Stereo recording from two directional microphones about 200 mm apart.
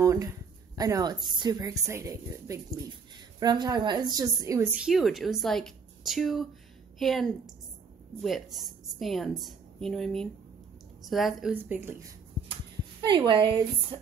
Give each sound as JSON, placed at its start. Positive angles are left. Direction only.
{"t": 0.0, "sound": "a woman's voice", "side_deg": -15}
{"t": 4.7, "sound": "a woman's voice", "side_deg": 0}
{"t": 13.0, "sound": "a woman's voice", "side_deg": -25}